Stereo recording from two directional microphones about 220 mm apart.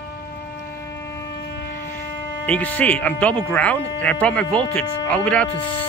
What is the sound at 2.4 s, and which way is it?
Speech, 5° left (ahead or behind).